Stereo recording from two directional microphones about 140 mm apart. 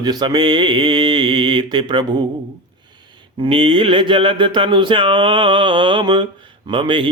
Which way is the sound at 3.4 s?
40° right (ahead or behind).